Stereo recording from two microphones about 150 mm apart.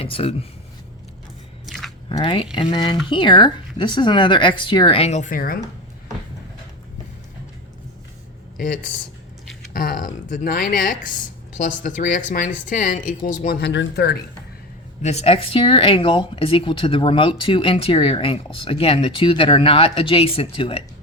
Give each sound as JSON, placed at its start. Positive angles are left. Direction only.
{"t": 0.0, "sound": "speech", "side_deg": 40}
{"t": 1.6, "sound": "biting", "side_deg": 0}
{"t": 2.0, "sound": "speech", "side_deg": 35}
{"t": 8.5, "sound": "speech", "side_deg": 70}
{"t": 15.0, "sound": "speech", "side_deg": 45}